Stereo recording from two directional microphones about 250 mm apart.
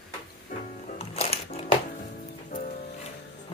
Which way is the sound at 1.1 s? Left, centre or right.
Left.